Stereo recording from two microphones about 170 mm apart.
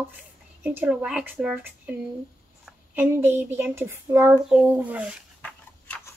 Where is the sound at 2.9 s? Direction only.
10° right (ahead or behind).